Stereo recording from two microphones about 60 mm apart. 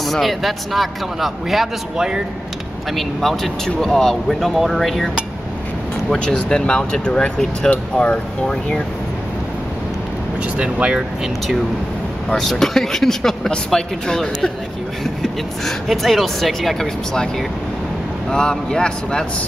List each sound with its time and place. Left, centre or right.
0.0 s a man's voice: centre
3.0 s a man's voice: centre
6.1 s speech: centre
10.6 s speech: centre
12.4 s a man's voice: centre
18.3 s speech: centre